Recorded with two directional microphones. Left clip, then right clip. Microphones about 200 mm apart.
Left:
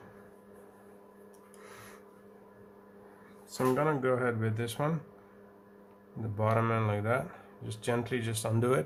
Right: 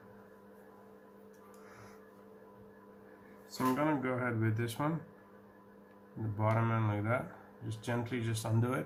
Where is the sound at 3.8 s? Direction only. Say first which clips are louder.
Left 4 dB; 45° left (ahead or behind).